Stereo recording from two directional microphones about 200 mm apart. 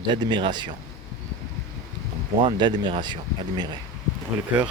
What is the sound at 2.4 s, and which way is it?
Speech, 25° right (ahead or behind).